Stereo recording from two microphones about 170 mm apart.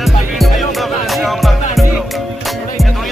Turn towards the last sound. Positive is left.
turn(degrees=0)  # may be behind; listen again after turning